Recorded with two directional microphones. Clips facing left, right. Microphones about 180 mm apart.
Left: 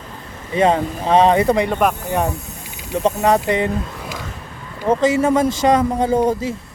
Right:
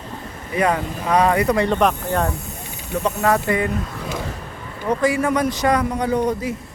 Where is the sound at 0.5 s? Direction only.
25° left (ahead or behind).